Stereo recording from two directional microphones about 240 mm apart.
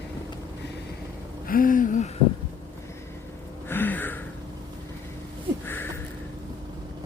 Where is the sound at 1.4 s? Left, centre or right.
Left.